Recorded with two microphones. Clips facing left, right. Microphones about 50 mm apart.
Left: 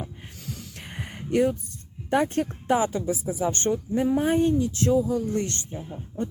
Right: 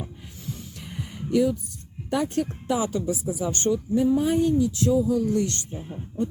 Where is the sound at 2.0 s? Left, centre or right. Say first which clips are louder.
Left 2 dB; left.